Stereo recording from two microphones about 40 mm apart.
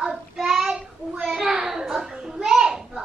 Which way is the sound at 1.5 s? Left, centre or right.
Centre.